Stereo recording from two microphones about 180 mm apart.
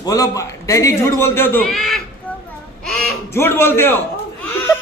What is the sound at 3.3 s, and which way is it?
Speech, 15° left (ahead or behind).